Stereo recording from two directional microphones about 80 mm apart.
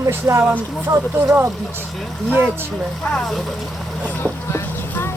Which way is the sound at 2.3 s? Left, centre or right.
Right.